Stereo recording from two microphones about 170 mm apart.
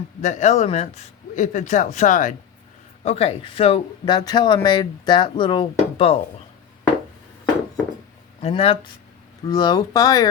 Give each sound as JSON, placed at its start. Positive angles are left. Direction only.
{"t": 0.2, "sound": "a man's voice", "side_deg": 45}
{"t": 3.0, "sound": "speech", "side_deg": 35}
{"t": 8.4, "sound": "speech", "side_deg": 35}